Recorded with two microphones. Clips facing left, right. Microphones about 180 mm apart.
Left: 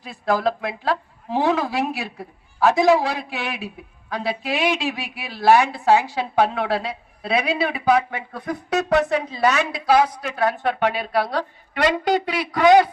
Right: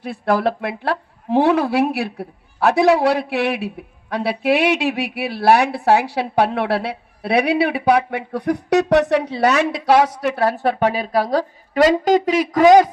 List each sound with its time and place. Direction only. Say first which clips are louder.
0.0 s speech: right 3 dB; 65° right (ahead or behind)
10.3 s a woman's voice: even; 35° right (ahead or behind)